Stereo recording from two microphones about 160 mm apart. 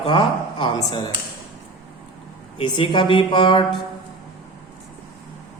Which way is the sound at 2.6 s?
30° left (ahead or behind).